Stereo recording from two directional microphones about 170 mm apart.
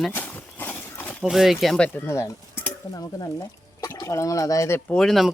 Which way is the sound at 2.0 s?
15° left (ahead or behind).